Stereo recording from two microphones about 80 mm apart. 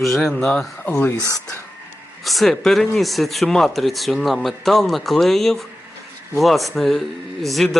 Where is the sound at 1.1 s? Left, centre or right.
Left.